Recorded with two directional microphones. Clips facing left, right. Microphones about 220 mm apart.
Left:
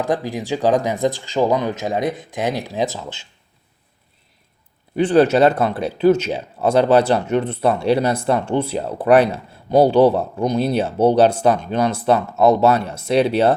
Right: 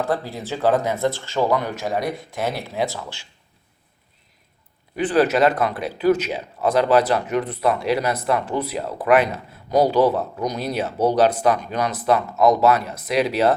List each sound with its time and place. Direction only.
0.0 s speech: 15° left (ahead or behind)
4.9 s speech: 30° left (ahead or behind)